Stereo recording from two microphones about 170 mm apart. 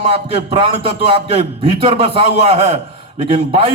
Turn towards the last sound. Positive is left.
turn(degrees=-30)  # may be behind; listen again after turning